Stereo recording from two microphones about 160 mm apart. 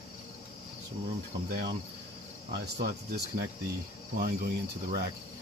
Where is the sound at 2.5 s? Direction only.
90° right.